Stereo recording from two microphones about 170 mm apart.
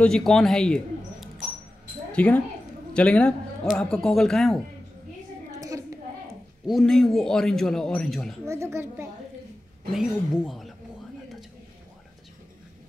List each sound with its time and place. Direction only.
0.0 s a man's voice: 5° left (ahead or behind)
5.6 s a sound: 20° right (ahead or behind)
6.6 s a man's voice: centre (ahead or behind)
8.5 s speech: 15° right (ahead or behind)
9.9 s a man's voice: 5° right (ahead or behind)